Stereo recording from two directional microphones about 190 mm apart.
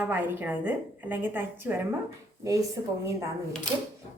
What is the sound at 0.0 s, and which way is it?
A woman's voice, 10° right (ahead or behind).